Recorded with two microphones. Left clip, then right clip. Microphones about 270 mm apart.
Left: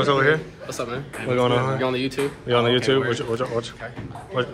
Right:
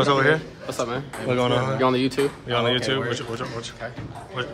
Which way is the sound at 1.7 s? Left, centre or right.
Right.